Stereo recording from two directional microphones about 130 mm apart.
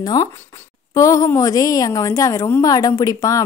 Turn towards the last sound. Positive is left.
turn(degrees=25)  # may be behind; listen again after turning